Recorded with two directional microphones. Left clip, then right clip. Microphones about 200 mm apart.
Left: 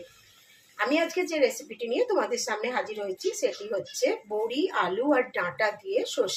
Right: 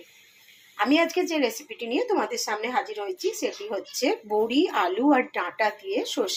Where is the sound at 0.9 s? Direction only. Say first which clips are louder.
Right 4 dB; 35° right (ahead or behind).